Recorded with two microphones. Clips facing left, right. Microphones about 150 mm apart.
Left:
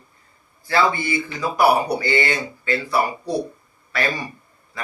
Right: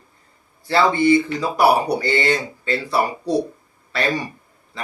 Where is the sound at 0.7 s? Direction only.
30° right (ahead or behind).